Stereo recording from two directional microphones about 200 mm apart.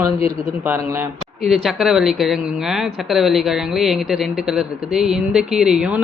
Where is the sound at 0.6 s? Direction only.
10° right (ahead or behind).